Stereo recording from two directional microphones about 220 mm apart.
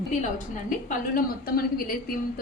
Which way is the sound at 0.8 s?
40° left (ahead or behind).